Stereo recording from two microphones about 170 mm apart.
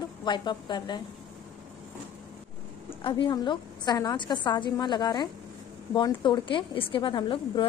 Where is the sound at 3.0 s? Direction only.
30° left (ahead or behind).